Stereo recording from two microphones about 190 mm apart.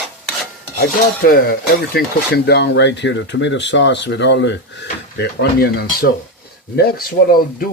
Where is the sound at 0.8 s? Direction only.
50° left (ahead or behind).